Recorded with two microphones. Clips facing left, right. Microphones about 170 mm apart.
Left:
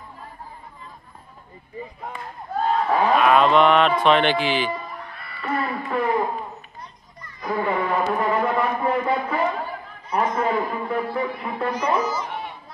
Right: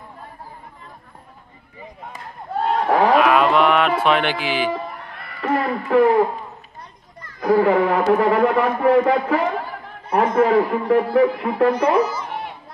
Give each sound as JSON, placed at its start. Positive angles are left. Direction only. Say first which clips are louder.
{"t": 2.6, "sound": "a sound", "louder": "right 3 dB", "side_deg": -80}
{"t": 3.3, "sound": "speech", "louder": "even", "side_deg": -5}
{"t": 5.6, "sound": "hoot", "louder": "right 9 dB", "side_deg": -85}
{"t": 7.2, "sound": "speech", "louder": "right 9 dB", "side_deg": -85}
{"t": 10.0, "sound": "a man's voice", "louder": "right 6 dB", "side_deg": -55}
{"t": 12.2, "sound": "a sound", "louder": "right 1 dB", "side_deg": -55}